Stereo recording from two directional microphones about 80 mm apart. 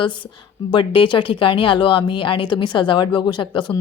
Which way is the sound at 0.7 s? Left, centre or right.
Left.